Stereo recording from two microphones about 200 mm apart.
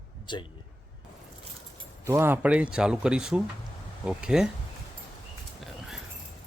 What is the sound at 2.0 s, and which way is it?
Speech, 15° right (ahead or behind).